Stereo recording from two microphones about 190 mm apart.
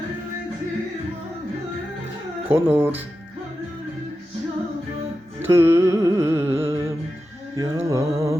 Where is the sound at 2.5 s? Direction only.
10° right (ahead or behind).